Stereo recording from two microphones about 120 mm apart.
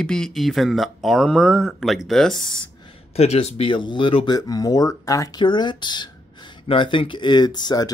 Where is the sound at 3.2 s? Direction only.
60° left (ahead or behind).